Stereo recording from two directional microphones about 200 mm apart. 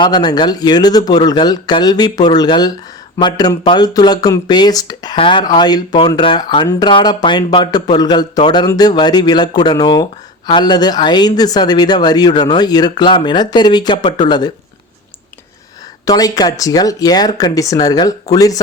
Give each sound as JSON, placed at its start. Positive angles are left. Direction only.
{"t": 0.0, "sound": "speech", "side_deg": 20}
{"t": 16.0, "sound": "speech", "side_deg": 15}